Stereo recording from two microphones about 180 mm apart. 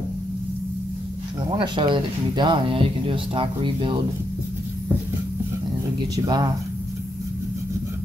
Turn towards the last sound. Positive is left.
turn(degrees=-25)  # may be behind; listen again after turning